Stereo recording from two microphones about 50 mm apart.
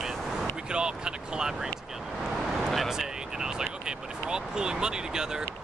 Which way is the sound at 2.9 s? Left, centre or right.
Centre.